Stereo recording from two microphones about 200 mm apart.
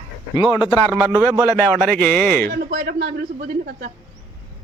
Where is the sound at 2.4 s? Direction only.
50° right (ahead or behind).